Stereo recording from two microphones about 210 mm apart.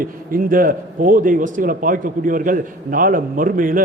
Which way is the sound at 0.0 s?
40° right (ahead or behind).